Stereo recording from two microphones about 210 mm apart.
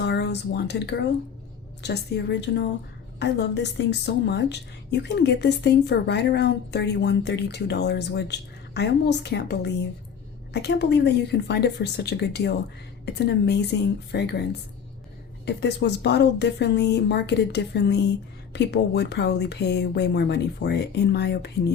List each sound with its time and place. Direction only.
0.0 s a woman's voice: 55° left (ahead or behind)
15.4 s a woman's voice: 55° left (ahead or behind)